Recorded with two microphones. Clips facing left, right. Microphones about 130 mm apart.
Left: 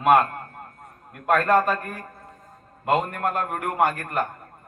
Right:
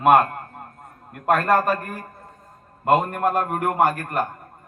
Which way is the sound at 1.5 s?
45° right (ahead or behind).